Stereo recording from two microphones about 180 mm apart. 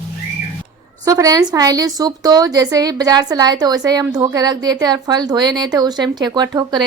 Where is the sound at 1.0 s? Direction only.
20° right (ahead or behind).